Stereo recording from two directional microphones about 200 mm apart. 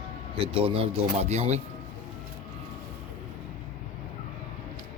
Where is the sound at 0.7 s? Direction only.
30° right (ahead or behind).